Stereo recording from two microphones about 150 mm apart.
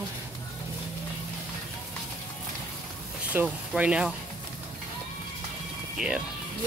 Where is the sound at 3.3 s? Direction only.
10° right (ahead or behind).